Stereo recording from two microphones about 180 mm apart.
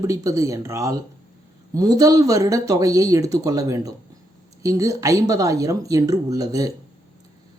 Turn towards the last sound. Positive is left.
turn(degrees=-20)  # may be behind; listen again after turning